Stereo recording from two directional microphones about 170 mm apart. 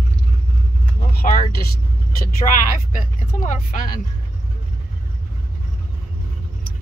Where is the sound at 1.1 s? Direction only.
55° left (ahead or behind).